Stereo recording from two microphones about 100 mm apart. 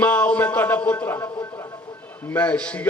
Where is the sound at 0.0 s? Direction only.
15° left (ahead or behind).